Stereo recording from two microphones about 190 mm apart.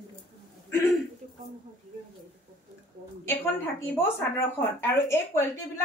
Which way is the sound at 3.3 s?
10° left (ahead or behind).